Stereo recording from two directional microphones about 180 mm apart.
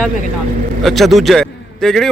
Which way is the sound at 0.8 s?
Centre (ahead or behind).